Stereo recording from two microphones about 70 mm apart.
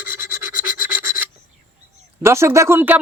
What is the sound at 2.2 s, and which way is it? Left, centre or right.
Speech, right.